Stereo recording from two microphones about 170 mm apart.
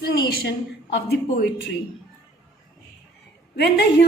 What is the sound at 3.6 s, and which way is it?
Speech, 75° left (ahead or behind).